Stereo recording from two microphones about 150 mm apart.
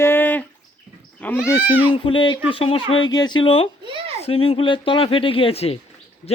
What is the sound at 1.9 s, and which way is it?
Speech, 35° left (ahead or behind).